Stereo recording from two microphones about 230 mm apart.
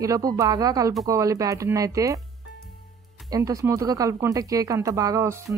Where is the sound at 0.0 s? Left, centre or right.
Centre.